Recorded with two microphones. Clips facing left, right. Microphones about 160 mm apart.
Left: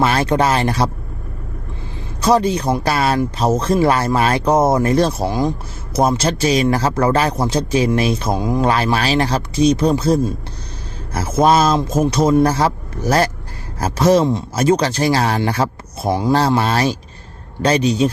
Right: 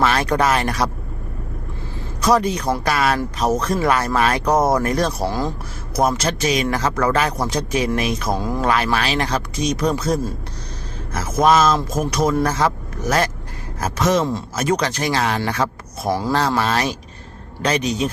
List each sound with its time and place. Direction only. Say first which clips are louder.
0.0 s speech: left 2 dB; 30° left (ahead or behind)
2.2 s speech: left 3 dB; 30° left (ahead or behind)
6.0 s speech: left 3 dB; 30° left (ahead or behind)
8.3 s speech: left 3 dB; 15° left (ahead or behind)
8.7 s speech: left 3 dB; 30° left (ahead or behind)